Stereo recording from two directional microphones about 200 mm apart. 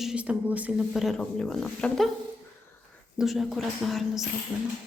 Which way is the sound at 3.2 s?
Centre (ahead or behind).